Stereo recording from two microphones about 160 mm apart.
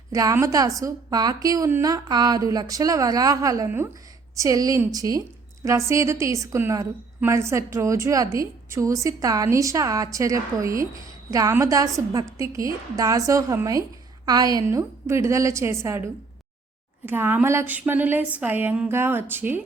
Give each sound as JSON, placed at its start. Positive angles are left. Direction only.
{"t": 0.1, "sound": "a woman's voice", "side_deg": -20}
{"t": 17.1, "sound": "speech", "side_deg": -15}